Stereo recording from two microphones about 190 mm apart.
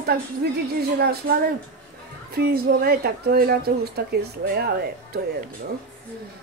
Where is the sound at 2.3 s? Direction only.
55° right (ahead or behind).